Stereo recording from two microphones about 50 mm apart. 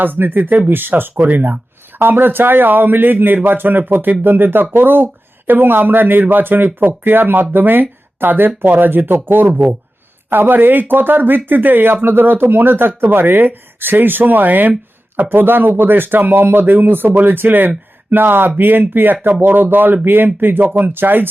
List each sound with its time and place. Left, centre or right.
0.0 s a man's voice: right